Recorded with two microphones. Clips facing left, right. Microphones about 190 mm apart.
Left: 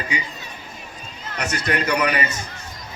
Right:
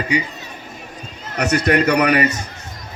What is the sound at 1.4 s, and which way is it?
Speech, 60° right (ahead or behind).